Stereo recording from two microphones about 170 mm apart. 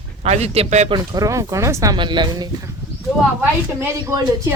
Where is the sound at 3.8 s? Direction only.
15° right (ahead or behind).